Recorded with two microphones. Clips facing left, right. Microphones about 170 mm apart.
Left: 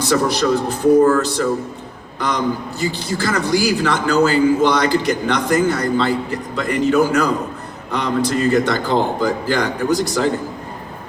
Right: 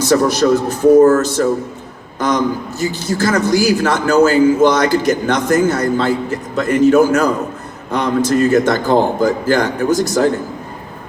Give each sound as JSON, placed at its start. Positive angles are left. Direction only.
{"t": 0.0, "sound": "a man's voice", "side_deg": -45}